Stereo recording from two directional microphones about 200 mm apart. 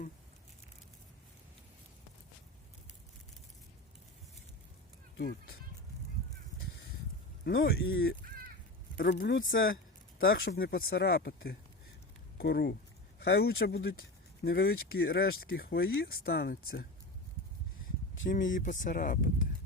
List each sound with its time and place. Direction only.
5.1 s speech: 50° left (ahead or behind)
7.4 s speech: 60° left (ahead or behind)
8.2 s caw: 45° right (ahead or behind)
9.0 s speech: 50° left (ahead or behind); by 9.6 s 65° left (ahead or behind)
10.2 s speech: 45° left (ahead or behind)
18.3 s speech: 40° left (ahead or behind)